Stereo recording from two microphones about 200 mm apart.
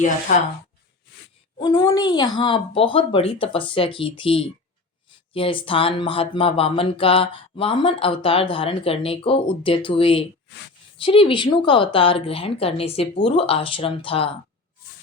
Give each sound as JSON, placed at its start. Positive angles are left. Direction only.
{"t": 1.5, "sound": "speech", "side_deg": 20}